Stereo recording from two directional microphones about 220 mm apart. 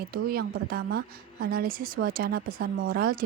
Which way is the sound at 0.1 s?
45° right (ahead or behind).